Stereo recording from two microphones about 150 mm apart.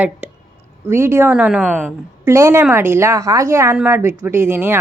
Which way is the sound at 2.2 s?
20° right (ahead or behind).